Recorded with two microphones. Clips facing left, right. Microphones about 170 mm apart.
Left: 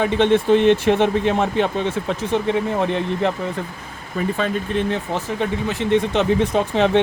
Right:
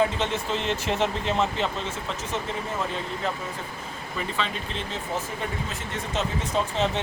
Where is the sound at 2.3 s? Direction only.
70° left (ahead or behind).